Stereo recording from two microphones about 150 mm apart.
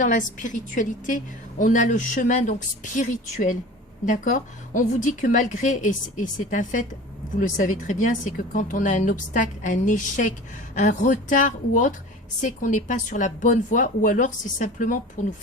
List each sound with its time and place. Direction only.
0.0 s a woman's voice: 55° left (ahead or behind)